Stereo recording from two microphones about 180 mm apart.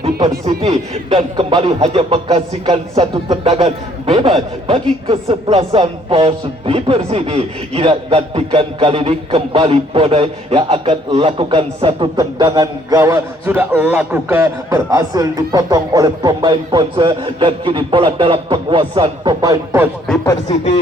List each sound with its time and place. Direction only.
0.4 s speech: 35° right (ahead or behind); by 19.9 s 20° right (ahead or behind)